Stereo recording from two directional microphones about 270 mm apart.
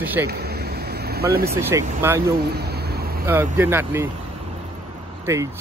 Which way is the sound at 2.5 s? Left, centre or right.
Right.